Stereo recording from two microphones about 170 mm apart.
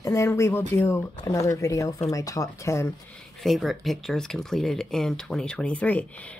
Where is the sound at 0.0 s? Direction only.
15° left (ahead or behind).